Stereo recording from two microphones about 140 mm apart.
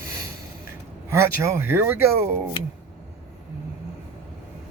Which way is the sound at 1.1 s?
20° right (ahead or behind).